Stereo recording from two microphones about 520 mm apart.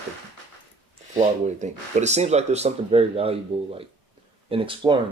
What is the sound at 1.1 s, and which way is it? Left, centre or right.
Speech, centre.